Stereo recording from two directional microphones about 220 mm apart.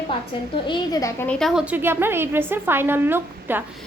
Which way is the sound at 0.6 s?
20° left (ahead or behind).